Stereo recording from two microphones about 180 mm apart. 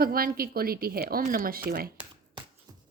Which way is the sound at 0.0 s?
55° right (ahead or behind).